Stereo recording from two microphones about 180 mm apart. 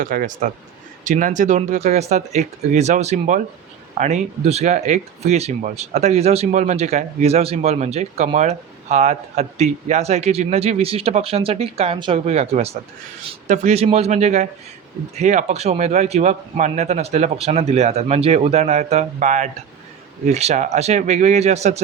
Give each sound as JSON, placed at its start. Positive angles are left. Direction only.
{"t": 0.0, "sound": "speech", "side_deg": -50}